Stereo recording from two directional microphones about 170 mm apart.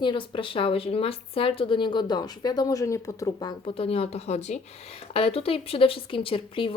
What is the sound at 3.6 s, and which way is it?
Speech, 35° left (ahead or behind).